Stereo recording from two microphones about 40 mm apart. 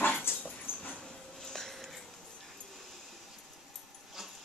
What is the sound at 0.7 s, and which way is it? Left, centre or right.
Dog, left.